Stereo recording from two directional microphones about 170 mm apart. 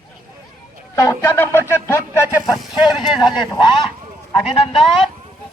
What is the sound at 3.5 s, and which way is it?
Speech, 30° left (ahead or behind).